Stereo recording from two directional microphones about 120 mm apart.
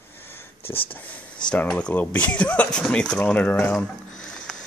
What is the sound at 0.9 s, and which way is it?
Speech, 10° left (ahead or behind).